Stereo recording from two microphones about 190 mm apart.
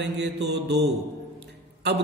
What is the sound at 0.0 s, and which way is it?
Speech, 65° right (ahead or behind).